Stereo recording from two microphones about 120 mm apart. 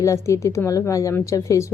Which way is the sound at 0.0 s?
25° left (ahead or behind).